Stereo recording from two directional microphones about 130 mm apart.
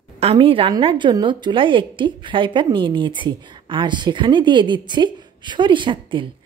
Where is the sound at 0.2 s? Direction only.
45° right (ahead or behind).